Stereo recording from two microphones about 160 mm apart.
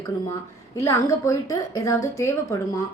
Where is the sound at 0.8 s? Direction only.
20° left (ahead or behind).